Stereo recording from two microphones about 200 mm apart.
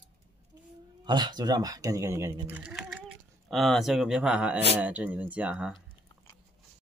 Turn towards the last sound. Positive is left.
turn(degrees=-5)  # may be behind; listen again after turning